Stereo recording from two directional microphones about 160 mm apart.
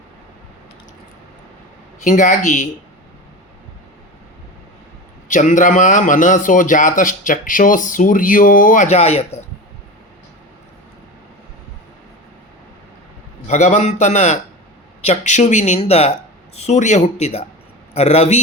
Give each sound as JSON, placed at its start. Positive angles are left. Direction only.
{"t": 2.0, "sound": "speech", "side_deg": 50}
{"t": 5.3, "sound": "a man's voice", "side_deg": 55}
{"t": 13.5, "sound": "speech", "side_deg": 50}